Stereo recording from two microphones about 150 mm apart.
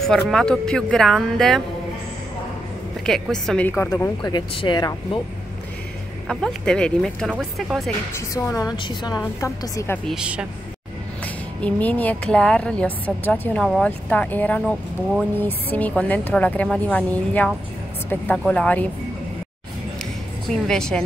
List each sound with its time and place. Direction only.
0.1 s speech: 5° left (ahead or behind)
3.1 s speech: 5° left (ahead or behind)
4.2 s a woman's voice: 30° left (ahead or behind)
6.2 s speech: 5° left (ahead or behind)
8.1 s a woman's voice: 20° left (ahead or behind)
9.2 s a woman's voice: 20° left (ahead or behind)
10.0 s speech: 5° right (ahead or behind)
11.6 s speech: 10° left (ahead or behind)
20.4 s speech: 5° left (ahead or behind)